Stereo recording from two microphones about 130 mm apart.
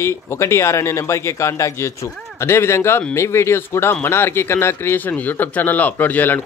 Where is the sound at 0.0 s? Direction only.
20° left (ahead or behind).